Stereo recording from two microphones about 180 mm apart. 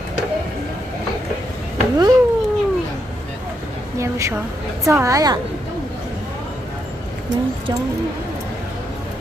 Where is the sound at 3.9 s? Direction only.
15° right (ahead or behind).